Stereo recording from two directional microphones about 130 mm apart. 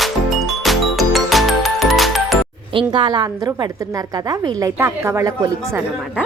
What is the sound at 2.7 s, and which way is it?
A woman's voice, 35° right (ahead or behind).